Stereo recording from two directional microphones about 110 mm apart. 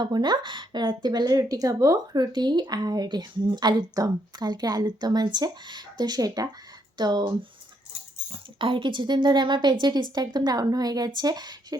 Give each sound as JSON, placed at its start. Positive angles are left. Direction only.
{"t": 0.0, "sound": "a woman's voice", "side_deg": -40}
{"t": 8.3, "sound": "a woman's voice", "side_deg": -50}